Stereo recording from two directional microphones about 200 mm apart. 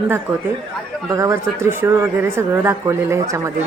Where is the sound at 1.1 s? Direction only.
15° right (ahead or behind).